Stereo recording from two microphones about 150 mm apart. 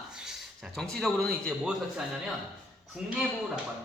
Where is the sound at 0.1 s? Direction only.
5° right (ahead or behind).